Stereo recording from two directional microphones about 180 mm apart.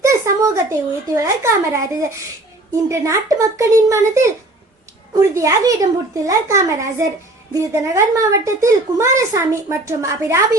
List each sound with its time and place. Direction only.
0.0 s a child's voice: 15° right (ahead or behind)